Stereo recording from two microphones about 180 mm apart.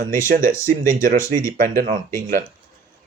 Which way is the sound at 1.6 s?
45° right (ahead or behind).